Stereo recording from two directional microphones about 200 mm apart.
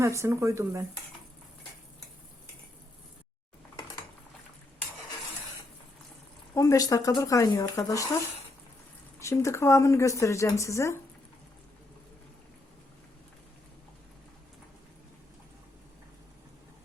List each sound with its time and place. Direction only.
0.0 s speech: 15° right (ahead or behind)
6.5 s a woman's voice: 15° left (ahead or behind)
9.2 s a woman's voice: 15° left (ahead or behind)